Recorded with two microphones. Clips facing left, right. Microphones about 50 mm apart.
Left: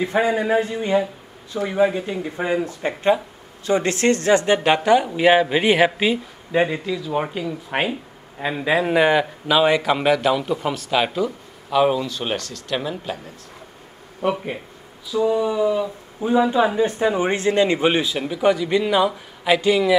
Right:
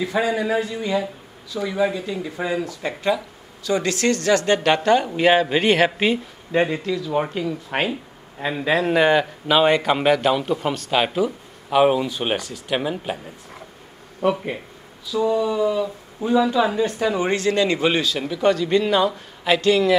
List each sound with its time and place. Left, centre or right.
0.0 s speech: left
4.6 s a man's voice: centre
9.5 s a man's voice: centre
11.7 s a man's voice: centre
15.1 s speech: centre
16.3 s speech: left; by 20.0 s centre